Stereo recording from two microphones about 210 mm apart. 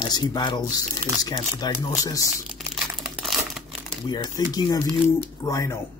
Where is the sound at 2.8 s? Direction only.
5° right (ahead or behind).